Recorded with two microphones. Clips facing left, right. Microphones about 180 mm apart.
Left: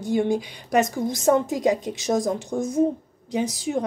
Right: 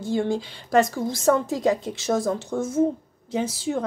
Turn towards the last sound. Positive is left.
turn(degrees=15)  # may be behind; listen again after turning